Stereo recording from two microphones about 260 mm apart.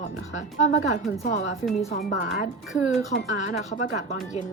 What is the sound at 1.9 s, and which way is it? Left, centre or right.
Speech, left.